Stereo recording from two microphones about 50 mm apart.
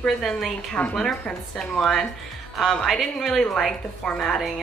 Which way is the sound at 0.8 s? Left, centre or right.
Left.